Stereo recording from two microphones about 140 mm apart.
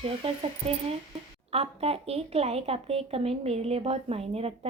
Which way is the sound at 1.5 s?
45° right (ahead or behind).